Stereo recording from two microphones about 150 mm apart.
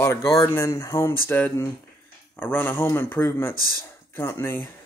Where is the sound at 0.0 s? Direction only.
20° left (ahead or behind).